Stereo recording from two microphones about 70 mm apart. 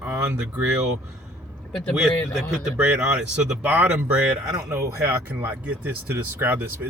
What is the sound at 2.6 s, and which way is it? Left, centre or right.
Speech, centre.